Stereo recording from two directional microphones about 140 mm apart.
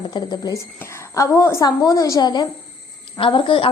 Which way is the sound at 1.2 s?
20° left (ahead or behind).